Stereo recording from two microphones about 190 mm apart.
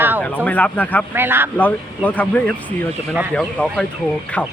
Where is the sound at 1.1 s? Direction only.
10° right (ahead or behind).